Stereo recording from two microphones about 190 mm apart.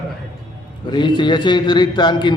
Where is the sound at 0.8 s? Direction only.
25° left (ahead or behind).